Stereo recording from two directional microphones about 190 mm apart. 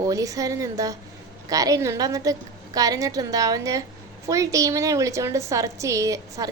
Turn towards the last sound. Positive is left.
turn(degrees=-15)  # may be behind; listen again after turning